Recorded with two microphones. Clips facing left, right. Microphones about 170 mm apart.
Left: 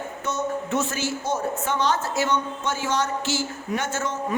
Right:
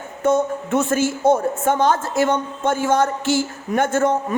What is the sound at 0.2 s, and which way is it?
A woman's voice, 55° right (ahead or behind).